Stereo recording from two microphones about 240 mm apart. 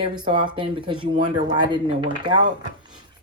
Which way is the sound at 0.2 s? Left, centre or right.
Centre.